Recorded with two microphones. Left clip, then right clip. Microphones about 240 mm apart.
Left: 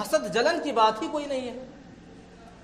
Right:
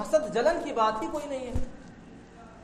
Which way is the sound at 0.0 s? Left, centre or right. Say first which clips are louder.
Even; left.